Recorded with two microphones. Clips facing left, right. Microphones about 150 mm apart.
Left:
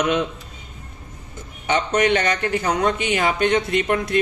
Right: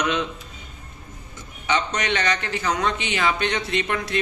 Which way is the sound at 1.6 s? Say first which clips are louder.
Left 5 dB; 50° left (ahead or behind).